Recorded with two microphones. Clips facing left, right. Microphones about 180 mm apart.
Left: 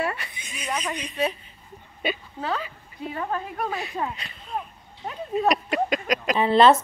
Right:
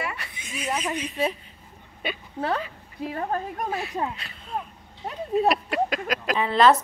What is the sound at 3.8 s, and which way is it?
Speech, centre (ahead or behind).